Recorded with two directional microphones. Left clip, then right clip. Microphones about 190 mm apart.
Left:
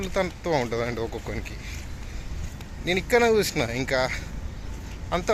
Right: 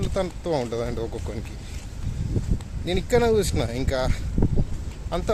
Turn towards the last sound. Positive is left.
turn(degrees=-10)  # may be behind; listen again after turning